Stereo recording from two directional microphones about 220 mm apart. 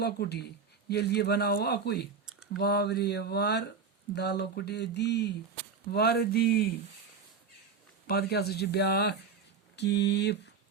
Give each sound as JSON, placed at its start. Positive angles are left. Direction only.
{"t": 0.0, "sound": "speech", "side_deg": 50}
{"t": 8.0, "sound": "speech", "side_deg": 45}